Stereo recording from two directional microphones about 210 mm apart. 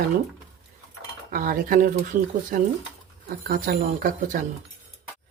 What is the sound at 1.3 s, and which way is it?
Speech, 40° right (ahead or behind).